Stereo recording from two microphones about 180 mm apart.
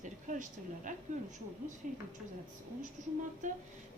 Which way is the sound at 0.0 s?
45° right (ahead or behind).